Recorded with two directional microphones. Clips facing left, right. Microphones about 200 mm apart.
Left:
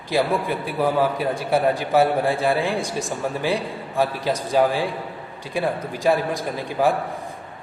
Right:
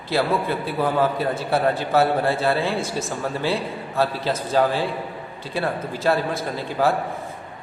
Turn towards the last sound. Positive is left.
turn(degrees=15)  # may be behind; listen again after turning